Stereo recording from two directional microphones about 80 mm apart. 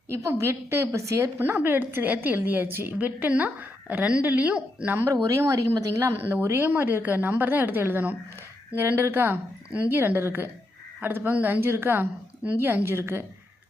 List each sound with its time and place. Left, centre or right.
0.1 s a woman's voice: right; by 4.9 s centre
5.3 s a woman's voice: right